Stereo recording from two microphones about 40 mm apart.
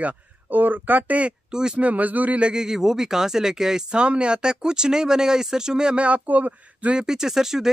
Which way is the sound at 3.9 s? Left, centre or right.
Right.